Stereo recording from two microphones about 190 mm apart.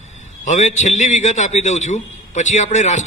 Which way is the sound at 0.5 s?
40° left (ahead or behind).